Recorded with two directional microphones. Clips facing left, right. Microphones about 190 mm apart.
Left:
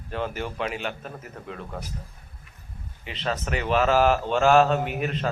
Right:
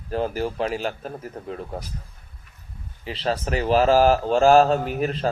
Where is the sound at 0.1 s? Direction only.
35° right (ahead or behind).